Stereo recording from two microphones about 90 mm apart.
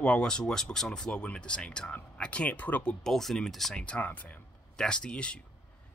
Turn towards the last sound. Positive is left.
turn(degrees=10)  # may be behind; listen again after turning